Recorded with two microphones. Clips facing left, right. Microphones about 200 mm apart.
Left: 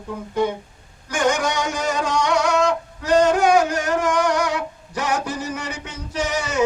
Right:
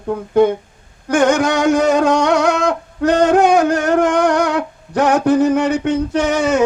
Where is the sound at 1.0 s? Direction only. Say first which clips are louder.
Right 7 dB; 60° right (ahead or behind).